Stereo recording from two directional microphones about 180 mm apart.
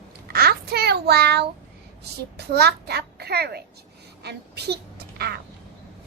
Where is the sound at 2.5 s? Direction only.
65° right (ahead or behind).